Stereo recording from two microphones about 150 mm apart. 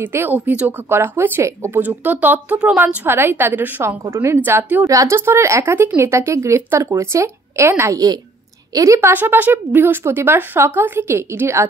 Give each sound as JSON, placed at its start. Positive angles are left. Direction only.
{"t": 0.0, "sound": "speech", "side_deg": -15}